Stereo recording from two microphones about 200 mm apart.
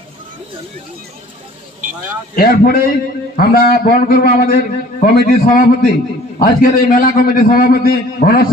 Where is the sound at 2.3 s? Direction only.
50° left (ahead or behind).